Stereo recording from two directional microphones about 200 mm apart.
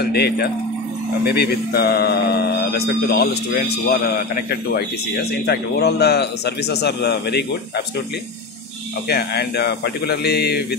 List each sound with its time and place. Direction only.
0.0 s a man's voice: 50° left (ahead or behind)
9.1 s a man's voice: 55° left (ahead or behind)